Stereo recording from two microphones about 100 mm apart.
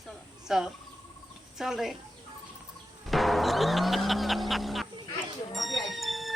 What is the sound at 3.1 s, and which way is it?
Music, centre (ahead or behind).